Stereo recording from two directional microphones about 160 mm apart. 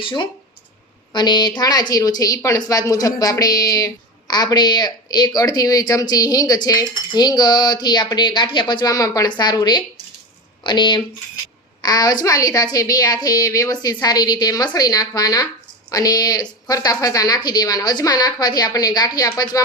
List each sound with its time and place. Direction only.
0.0 s a woman's voice: 30° left (ahead or behind)